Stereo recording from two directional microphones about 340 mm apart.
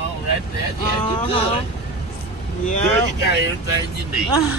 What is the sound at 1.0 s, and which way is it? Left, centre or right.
Speech, centre.